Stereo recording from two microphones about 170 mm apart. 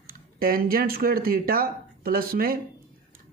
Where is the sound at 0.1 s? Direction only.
60° right (ahead or behind).